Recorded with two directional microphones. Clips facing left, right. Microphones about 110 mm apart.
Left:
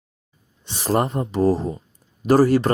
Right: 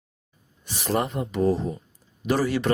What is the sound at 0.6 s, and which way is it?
Speech, 30° left (ahead or behind).